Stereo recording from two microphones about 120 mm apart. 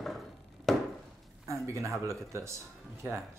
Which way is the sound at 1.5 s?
25° right (ahead or behind).